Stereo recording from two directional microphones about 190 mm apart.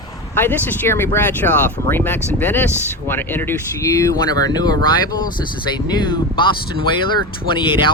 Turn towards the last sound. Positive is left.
turn(degrees=25)  # may be behind; listen again after turning